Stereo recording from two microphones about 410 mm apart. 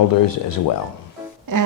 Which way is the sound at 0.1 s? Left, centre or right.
Left.